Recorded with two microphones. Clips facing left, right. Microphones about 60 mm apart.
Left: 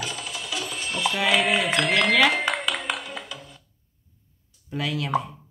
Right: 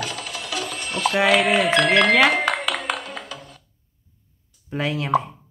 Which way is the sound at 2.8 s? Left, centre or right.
Centre.